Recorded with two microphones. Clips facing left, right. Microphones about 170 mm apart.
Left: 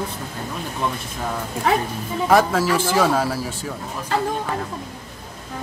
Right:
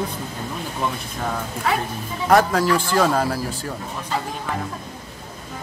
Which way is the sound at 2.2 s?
Centre (ahead or behind).